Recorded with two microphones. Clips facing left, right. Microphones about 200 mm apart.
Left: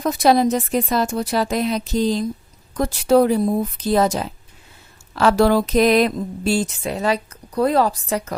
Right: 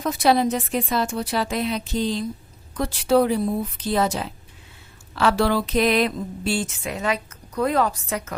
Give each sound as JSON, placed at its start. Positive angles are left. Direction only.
{"t": 0.0, "sound": "speech", "side_deg": 40}